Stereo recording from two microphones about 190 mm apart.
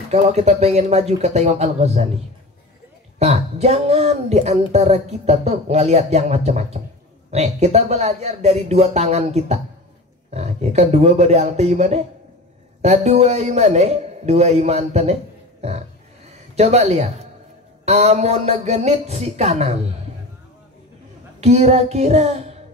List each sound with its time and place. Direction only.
0.1 s speech: 35° right (ahead or behind)
3.2 s speech: 35° right (ahead or behind)
16.3 s a man's voice: 35° right (ahead or behind)
21.4 s speech: 35° right (ahead or behind)